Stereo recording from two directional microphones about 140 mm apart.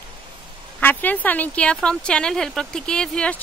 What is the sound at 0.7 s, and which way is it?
Speech, 10° left (ahead or behind).